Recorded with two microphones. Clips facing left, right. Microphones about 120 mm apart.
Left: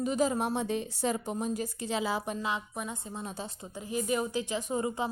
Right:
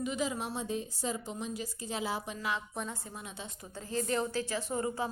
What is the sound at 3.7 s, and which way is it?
A woman's voice, 15° left (ahead or behind).